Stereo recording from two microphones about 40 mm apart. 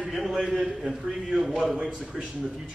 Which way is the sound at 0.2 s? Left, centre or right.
Centre.